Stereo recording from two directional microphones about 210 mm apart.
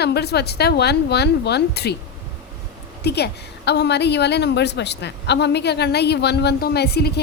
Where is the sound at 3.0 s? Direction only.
50° left (ahead or behind).